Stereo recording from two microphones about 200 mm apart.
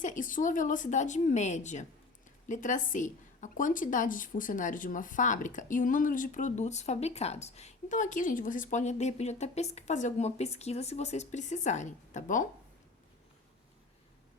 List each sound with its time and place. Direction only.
0.0 s a woman's voice: 40° left (ahead or behind)